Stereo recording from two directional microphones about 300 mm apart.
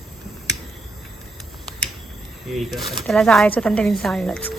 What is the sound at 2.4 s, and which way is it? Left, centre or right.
Speech, centre.